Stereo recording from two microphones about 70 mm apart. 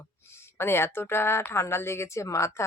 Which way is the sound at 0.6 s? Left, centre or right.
Left.